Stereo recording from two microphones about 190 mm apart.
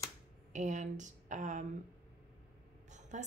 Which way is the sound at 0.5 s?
40° right (ahead or behind).